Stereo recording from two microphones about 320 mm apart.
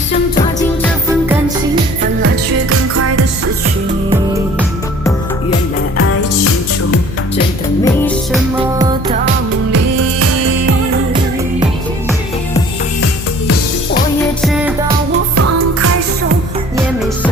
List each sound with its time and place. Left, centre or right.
2.6 s music: right
6.0 s music: left
7.9 s music: centre
8.8 s music: centre
9.7 s music: right
14.4 s music: centre
15.4 s music: right